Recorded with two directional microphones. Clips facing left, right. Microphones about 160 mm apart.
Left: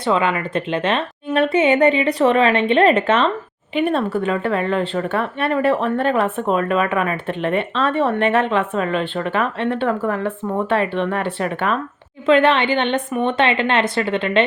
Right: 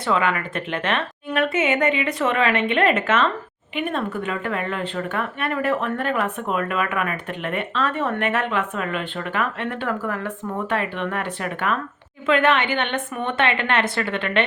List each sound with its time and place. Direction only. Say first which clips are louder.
0.0 s a woman's voice: left 3 dB; 25° left (ahead or behind)